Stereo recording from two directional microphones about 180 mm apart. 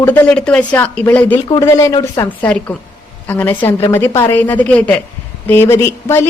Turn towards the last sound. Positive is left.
turn(degrees=15)  # may be behind; listen again after turning